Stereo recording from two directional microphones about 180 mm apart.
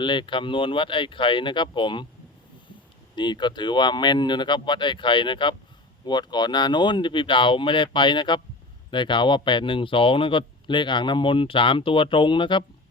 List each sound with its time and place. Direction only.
0.0 s speech: 25° left (ahead or behind)
3.2 s speech: 25° left (ahead or behind)